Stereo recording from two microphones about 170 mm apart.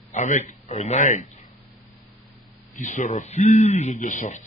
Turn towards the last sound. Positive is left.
turn(degrees=50)  # may be behind; listen again after turning